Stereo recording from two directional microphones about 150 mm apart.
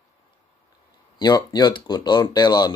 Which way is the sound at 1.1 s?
25° left (ahead or behind).